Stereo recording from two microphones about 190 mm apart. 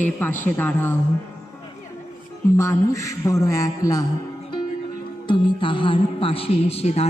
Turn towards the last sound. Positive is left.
turn(degrees=30)  # may be behind; listen again after turning